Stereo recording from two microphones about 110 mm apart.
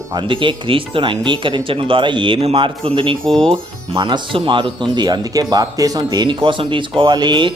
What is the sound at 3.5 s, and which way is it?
Speech, 45° right (ahead or behind).